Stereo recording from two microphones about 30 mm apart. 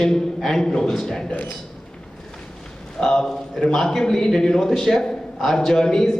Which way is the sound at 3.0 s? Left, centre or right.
Left.